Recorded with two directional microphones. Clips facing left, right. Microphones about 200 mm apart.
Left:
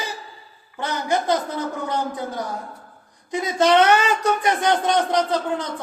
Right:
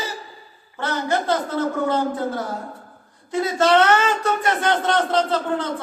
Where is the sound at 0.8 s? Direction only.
15° left (ahead or behind).